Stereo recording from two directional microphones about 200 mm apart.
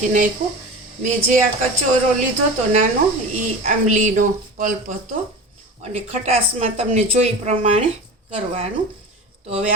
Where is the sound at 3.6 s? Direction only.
35° right (ahead or behind).